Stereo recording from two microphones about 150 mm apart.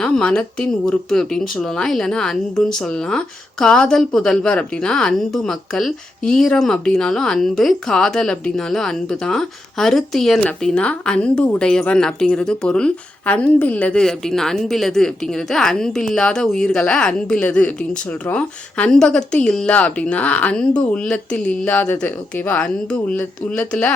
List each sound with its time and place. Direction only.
0.0 s speech: 5° left (ahead or behind)